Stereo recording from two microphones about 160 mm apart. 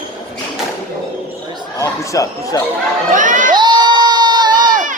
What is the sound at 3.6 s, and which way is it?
Crowd, 25° right (ahead or behind).